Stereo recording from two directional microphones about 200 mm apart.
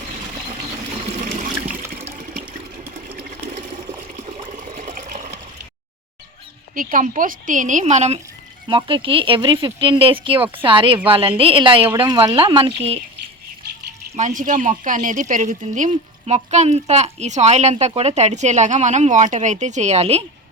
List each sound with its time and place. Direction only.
1.2 s toilet flush: 40° right (ahead or behind)
3.5 s water: 35° right (ahead or behind)
6.7 s speech: 40° right (ahead or behind)
14.2 s speech: 40° right (ahead or behind)